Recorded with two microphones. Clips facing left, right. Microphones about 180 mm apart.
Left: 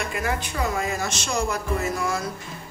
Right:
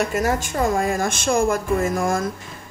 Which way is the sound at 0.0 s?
40° right (ahead or behind).